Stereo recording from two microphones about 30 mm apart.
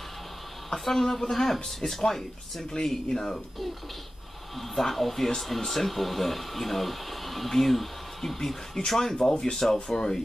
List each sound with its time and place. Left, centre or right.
0.7 s speech: centre
4.6 s speech: centre; by 10.1 s left